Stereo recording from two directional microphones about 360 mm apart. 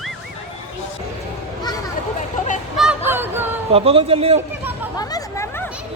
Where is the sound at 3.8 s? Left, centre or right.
Centre.